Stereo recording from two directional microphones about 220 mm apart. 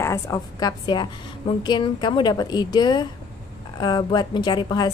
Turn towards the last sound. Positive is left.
turn(degrees=20)  # may be behind; listen again after turning